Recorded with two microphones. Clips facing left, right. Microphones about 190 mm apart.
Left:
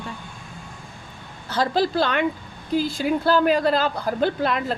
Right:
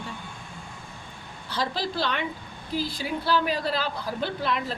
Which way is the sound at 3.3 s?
50° left (ahead or behind).